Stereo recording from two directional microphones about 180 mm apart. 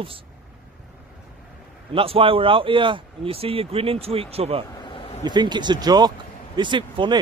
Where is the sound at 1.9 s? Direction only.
30° right (ahead or behind).